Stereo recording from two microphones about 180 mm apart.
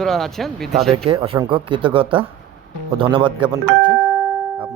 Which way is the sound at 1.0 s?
30° right (ahead or behind).